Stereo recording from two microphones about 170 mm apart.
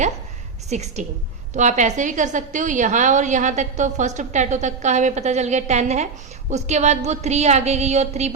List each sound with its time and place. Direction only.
0.7 s a woman's voice: 40° right (ahead or behind)